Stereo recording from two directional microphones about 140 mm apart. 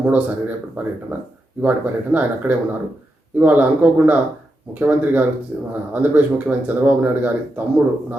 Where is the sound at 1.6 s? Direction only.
10° right (ahead or behind).